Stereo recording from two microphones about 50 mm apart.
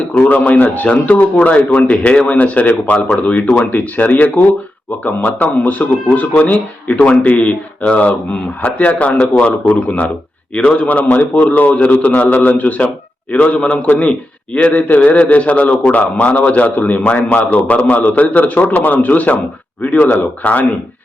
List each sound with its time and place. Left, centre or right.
0.1 s a man's voice: left